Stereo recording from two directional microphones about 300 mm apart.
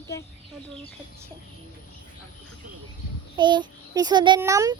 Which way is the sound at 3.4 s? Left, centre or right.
Centre.